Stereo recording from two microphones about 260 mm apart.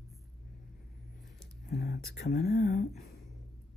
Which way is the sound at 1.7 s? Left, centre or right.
Left.